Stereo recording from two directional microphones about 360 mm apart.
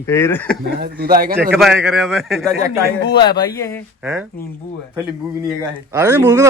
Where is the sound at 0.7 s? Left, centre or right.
Right.